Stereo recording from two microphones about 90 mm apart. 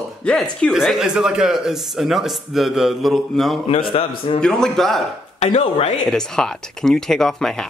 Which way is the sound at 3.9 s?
85° left.